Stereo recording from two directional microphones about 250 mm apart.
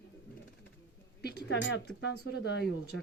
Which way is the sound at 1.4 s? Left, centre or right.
Left.